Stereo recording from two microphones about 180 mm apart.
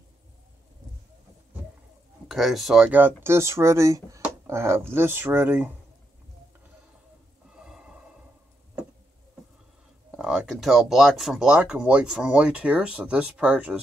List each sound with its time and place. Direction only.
2.2 s speech: centre (ahead or behind)
7.4 s a sound: 5° right (ahead or behind)
10.1 s speech: centre (ahead or behind)